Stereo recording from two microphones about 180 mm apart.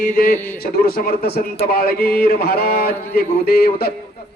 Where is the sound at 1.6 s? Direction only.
55° left (ahead or behind).